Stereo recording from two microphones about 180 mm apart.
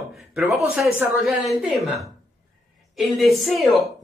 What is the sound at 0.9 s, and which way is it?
Speech, centre (ahead or behind).